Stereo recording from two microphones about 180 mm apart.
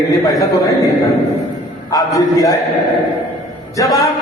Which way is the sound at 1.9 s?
20° left (ahead or behind).